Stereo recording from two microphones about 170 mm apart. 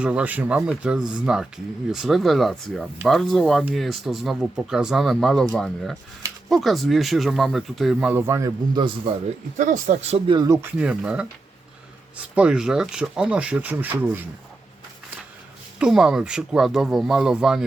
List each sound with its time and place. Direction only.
0.0 s speech: 5° right (ahead or behind); by 9.1 s 25° right (ahead or behind)
9.6 s speech: 45° right (ahead or behind)
10.3 s speech: 20° right (ahead or behind)
15.8 s speech: 5° right (ahead or behind)